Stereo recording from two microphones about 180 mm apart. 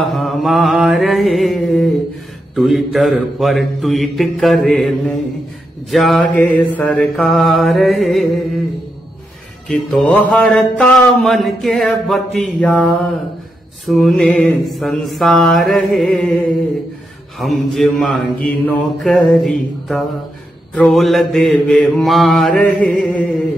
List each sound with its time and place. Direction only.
0.0 s mantra: centre (ahead or behind)
9.7 s mantra: 5° left (ahead or behind)
13.8 s mantra: centre (ahead or behind)
17.4 s mantra: centre (ahead or behind)